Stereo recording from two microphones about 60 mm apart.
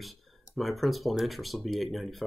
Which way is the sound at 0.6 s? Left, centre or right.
Centre.